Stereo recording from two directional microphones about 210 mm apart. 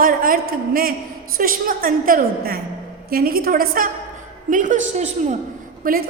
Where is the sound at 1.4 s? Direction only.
40° right (ahead or behind).